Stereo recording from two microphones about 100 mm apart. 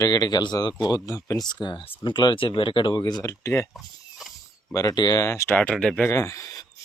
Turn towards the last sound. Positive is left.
turn(degrees=35)  # may be behind; listen again after turning